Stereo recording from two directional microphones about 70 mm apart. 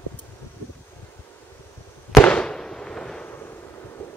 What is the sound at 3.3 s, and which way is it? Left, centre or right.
Artillery fire, left.